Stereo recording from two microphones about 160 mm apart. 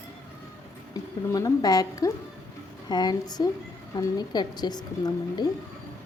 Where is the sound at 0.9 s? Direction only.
20° left (ahead or behind).